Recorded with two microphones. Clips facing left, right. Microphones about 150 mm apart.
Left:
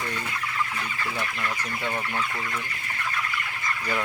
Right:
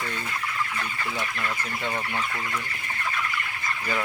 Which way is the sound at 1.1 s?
5° right (ahead or behind).